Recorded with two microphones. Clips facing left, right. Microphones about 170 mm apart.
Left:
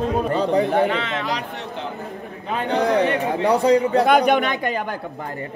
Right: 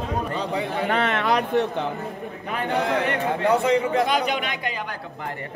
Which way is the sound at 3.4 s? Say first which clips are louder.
Left 4 dB; 35° left (ahead or behind).